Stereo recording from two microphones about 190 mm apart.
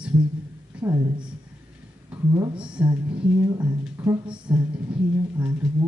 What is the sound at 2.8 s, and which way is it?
Speech, 25° right (ahead or behind).